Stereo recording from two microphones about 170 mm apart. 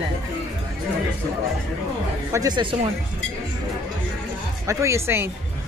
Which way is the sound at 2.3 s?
25° right (ahead or behind).